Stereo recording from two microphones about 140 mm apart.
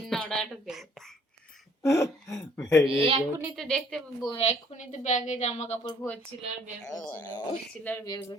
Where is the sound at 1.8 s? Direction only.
20° left (ahead or behind).